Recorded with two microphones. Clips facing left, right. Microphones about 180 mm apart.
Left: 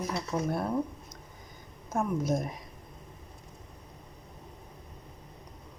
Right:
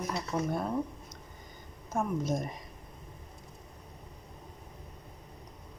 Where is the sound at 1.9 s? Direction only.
10° left (ahead or behind).